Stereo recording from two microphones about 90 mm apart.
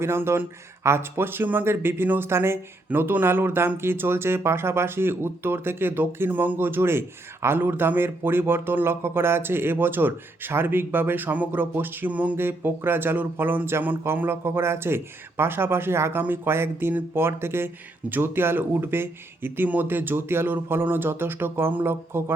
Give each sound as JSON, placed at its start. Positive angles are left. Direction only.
{"t": 0.0, "sound": "a man's voice", "side_deg": -30}